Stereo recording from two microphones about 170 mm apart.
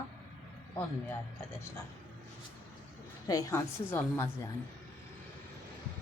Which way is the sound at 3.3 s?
20° left (ahead or behind).